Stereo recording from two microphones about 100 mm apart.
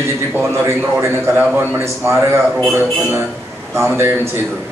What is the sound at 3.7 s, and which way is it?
Speech, 25° right (ahead or behind).